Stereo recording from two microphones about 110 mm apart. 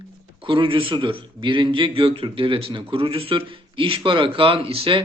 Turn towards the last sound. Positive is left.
turn(degrees=-55)  # may be behind; listen again after turning